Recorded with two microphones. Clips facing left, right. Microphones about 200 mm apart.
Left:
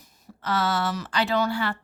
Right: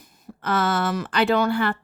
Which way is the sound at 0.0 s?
50° right (ahead or behind).